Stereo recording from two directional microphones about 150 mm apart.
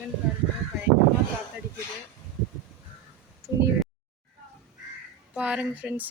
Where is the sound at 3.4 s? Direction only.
20° right (ahead or behind).